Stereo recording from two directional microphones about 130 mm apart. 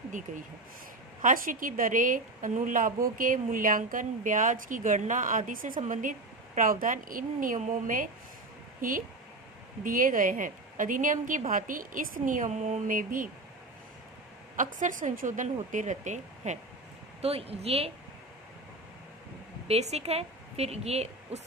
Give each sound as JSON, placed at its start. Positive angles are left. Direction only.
{"t": 0.3, "sound": "speech", "side_deg": -70}
{"t": 1.2, "sound": "a woman's voice", "side_deg": -90}
{"t": 14.5, "sound": "speech", "side_deg": -85}
{"t": 17.2, "sound": "a woman's voice", "side_deg": -50}
{"t": 19.6, "sound": "a woman's voice", "side_deg": -55}